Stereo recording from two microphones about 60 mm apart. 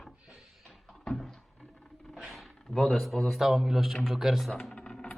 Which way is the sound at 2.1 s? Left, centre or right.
Centre.